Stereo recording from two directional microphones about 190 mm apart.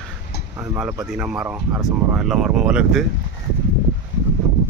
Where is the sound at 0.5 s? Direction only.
10° right (ahead or behind).